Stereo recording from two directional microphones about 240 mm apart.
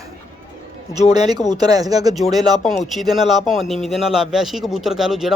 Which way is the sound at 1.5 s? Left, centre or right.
Centre.